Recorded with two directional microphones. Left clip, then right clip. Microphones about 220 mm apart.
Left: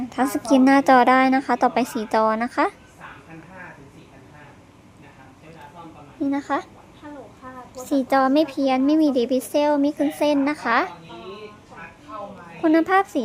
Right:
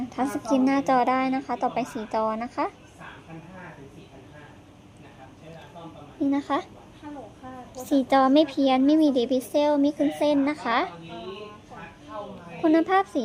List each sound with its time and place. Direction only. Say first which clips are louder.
0.1 s speech: left 6 dB; 15° left (ahead or behind)
6.3 s speech: left 2 dB; 10° left (ahead or behind)
7.8 s speech: left 1 dB; 5° left (ahead or behind)
12.6 s speech: left 3 dB; 10° left (ahead or behind)